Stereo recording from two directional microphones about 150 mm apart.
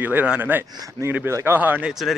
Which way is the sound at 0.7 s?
25° right (ahead or behind).